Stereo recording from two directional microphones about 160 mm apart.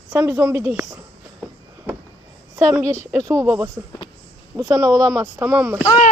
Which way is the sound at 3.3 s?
15° right (ahead or behind).